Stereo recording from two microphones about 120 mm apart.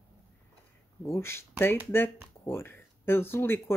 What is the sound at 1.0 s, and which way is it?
Speech, 20° left (ahead or behind).